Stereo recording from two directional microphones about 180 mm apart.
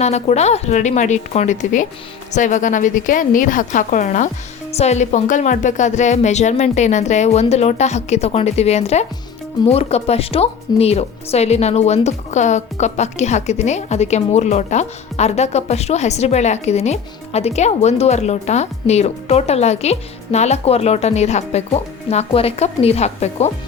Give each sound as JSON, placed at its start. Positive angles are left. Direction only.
{"t": 0.0, "sound": "a woman's voice", "side_deg": 40}